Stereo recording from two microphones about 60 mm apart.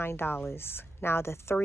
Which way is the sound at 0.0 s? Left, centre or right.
Left.